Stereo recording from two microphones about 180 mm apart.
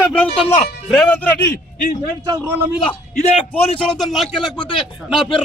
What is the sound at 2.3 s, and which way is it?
Speech, 15° right (ahead or behind).